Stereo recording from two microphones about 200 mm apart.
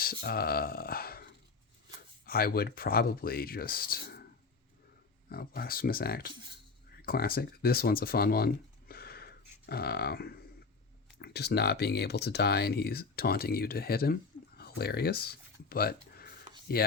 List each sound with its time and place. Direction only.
0.0 s speech: 50° left (ahead or behind)
2.2 s speech: 50° left (ahead or behind)
5.3 s speech: 50° left (ahead or behind)
8.9 s a sound: 50° left (ahead or behind)
11.2 s speech: 55° left (ahead or behind)